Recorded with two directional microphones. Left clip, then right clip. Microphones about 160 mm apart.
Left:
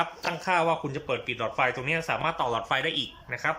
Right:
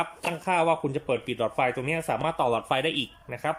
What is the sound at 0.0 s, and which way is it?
Speech, 20° right (ahead or behind).